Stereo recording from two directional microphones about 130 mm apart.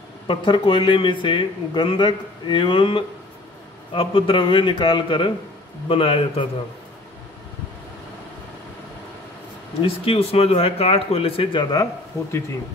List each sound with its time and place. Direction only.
0.3 s speech: 40° left (ahead or behind)
9.8 s speech: 45° left (ahead or behind)
11.7 s speech: 25° left (ahead or behind)